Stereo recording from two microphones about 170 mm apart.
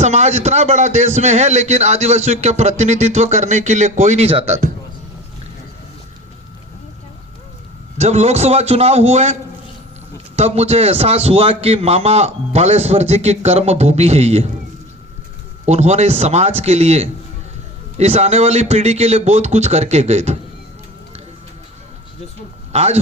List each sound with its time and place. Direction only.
0.0 s a man's voice: 40° right (ahead or behind)
7.9 s a man's voice: 40° right (ahead or behind)
15.6 s a man's voice: 40° right (ahead or behind)
22.7 s speech: 40° right (ahead or behind)